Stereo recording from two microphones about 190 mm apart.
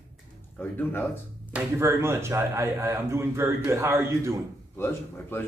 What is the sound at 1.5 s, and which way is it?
Speech, 15° right (ahead or behind).